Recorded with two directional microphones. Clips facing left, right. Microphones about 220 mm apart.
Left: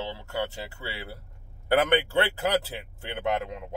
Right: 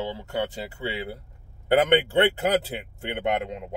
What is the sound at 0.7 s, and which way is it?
Speech, 20° right (ahead or behind).